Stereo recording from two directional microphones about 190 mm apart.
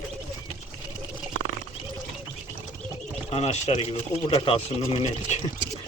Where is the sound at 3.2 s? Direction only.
30° left (ahead or behind).